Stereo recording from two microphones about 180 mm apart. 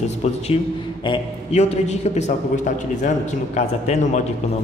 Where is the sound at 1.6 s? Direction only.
40° left (ahead or behind).